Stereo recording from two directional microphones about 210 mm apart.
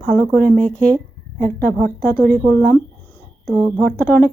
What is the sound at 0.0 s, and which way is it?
Speech, 5° left (ahead or behind).